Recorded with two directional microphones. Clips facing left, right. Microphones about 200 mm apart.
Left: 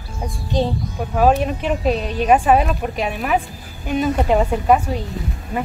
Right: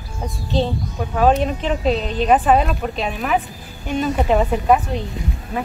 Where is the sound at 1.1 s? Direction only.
5° left (ahead or behind).